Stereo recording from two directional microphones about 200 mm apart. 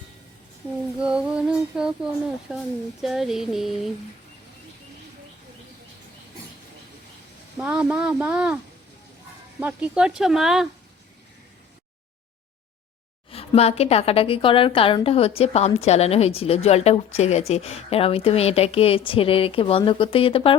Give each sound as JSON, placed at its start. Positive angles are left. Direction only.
{"t": 0.9, "sound": "speech", "side_deg": -5}
{"t": 3.0, "sound": "speech", "side_deg": 0}
{"t": 7.6, "sound": "speech", "side_deg": -5}
{"t": 9.6, "sound": "speech", "side_deg": -5}
{"t": 13.3, "sound": "a woman's voice", "side_deg": 30}